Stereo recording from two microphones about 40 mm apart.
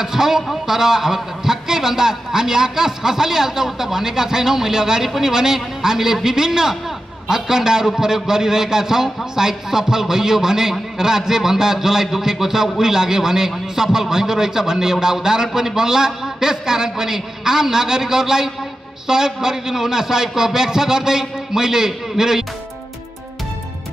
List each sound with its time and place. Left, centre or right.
0.0 s a man's voice: centre